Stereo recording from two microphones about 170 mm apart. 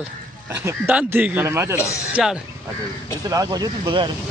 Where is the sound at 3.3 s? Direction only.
20° right (ahead or behind).